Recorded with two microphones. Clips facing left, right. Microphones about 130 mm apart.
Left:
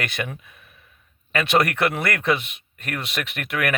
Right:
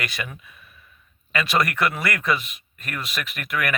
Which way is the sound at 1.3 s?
60° left (ahead or behind).